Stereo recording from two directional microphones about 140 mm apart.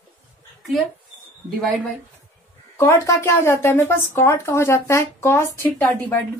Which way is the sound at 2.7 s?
20° left (ahead or behind).